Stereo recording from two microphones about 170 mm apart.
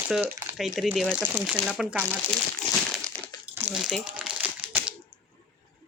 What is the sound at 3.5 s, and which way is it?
Crumpling, 10° right (ahead or behind).